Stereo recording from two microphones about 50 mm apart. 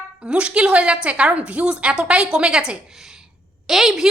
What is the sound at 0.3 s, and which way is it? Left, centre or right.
A woman's voice, right.